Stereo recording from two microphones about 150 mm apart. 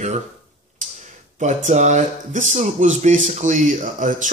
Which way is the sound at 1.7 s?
50° right (ahead or behind).